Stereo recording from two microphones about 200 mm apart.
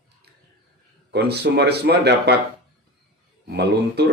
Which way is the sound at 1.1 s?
55° right (ahead or behind).